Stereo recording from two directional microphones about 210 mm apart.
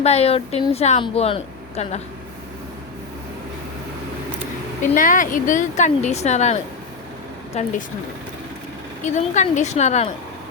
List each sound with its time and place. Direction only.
0.0 s speech: 30° left (ahead or behind)
4.8 s a woman's voice: 40° left (ahead or behind)
9.0 s a woman's voice: 35° left (ahead or behind)